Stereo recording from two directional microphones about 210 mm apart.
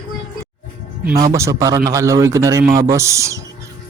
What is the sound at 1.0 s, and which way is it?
Speech, 15° right (ahead or behind).